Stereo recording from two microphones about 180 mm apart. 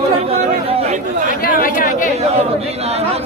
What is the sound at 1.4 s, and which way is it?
Speech, 50° left (ahead or behind).